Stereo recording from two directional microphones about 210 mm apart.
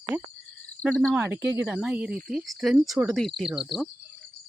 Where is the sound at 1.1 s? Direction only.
10° right (ahead or behind).